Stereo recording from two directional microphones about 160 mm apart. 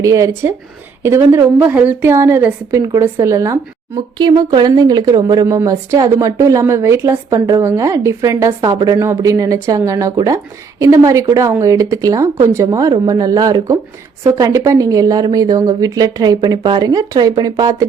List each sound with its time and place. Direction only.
0.0 s a woman's voice: 20° right (ahead or behind)